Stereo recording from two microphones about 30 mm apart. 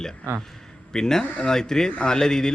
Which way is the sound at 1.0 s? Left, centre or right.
Centre.